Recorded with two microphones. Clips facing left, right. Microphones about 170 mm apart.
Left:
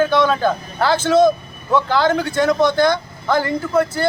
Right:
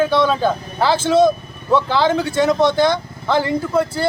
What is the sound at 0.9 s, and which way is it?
Speech, 30° right (ahead or behind).